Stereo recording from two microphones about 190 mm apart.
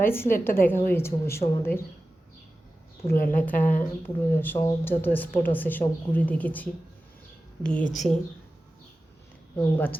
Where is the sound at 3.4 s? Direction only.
10° left (ahead or behind).